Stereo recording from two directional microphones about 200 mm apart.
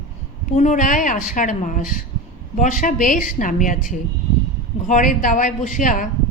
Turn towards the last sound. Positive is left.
turn(degrees=40)  # may be behind; listen again after turning